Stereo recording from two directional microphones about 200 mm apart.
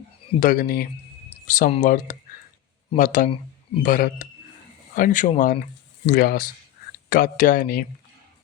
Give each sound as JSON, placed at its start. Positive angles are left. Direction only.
{"t": 0.3, "sound": "speech", "side_deg": 45}